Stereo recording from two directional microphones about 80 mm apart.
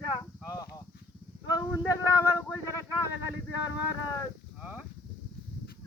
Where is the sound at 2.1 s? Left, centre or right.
Left.